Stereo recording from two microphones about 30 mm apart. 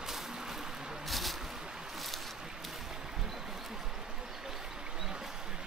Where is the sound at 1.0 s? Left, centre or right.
Centre.